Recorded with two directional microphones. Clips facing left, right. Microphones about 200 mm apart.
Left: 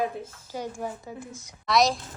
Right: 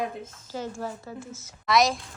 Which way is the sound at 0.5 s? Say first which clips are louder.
Even; 15° left (ahead or behind).